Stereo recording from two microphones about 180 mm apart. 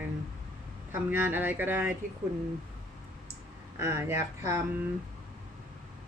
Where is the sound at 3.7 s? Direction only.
15° right (ahead or behind).